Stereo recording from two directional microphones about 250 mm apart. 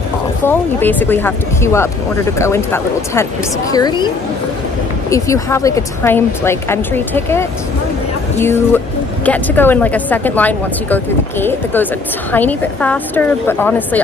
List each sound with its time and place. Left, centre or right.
0.5 s speech: centre
5.1 s speech: centre